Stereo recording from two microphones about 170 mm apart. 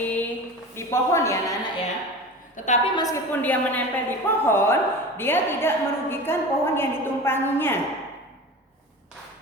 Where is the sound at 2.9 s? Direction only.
20° left (ahead or behind).